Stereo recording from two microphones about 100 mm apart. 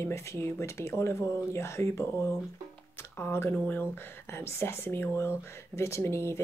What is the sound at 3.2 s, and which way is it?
Speech, 25° left (ahead or behind).